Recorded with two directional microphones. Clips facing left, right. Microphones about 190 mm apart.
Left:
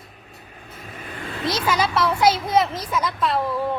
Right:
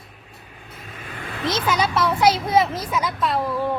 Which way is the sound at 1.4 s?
Centre (ahead or behind).